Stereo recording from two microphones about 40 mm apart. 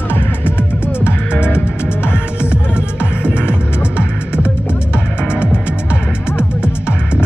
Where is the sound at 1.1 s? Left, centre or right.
Left.